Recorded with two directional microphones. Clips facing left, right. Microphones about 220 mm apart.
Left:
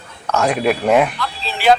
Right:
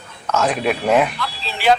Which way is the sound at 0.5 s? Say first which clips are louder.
Left 3 dB; centre (ahead or behind).